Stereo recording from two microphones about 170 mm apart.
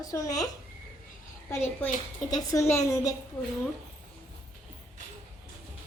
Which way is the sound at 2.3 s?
20° left (ahead or behind).